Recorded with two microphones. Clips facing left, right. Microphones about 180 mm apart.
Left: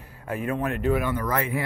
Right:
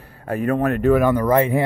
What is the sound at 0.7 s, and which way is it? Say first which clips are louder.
Speech: right 10 dB; 40° right (ahead or behind).